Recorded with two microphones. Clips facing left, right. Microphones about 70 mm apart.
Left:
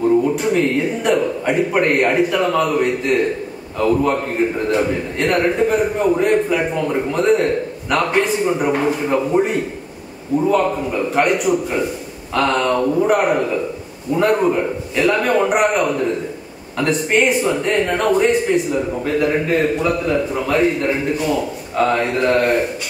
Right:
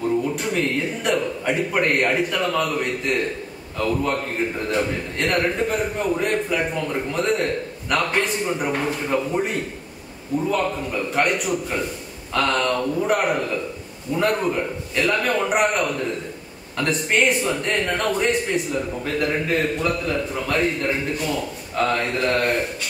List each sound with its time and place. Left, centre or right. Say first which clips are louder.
0.0 s a man's voice: left 7 dB; centre